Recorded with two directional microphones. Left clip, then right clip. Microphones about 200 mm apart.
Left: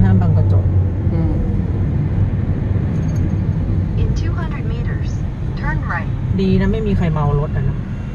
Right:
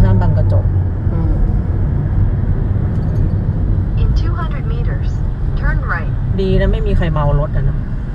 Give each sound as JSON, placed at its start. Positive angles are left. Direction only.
{"t": 6.3, "sound": "speech", "side_deg": -50}